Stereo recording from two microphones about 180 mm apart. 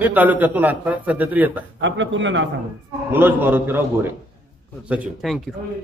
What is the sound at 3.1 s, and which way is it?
A man's voice, 10° right (ahead or behind).